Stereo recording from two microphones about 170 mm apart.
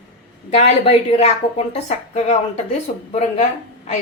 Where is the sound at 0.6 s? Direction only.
40° left (ahead or behind).